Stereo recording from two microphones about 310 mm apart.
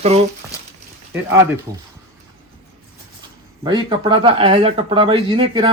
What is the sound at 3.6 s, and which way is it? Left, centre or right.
A man's voice, centre.